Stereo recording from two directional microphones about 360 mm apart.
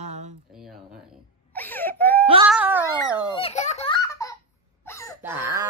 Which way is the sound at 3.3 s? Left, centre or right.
Centre.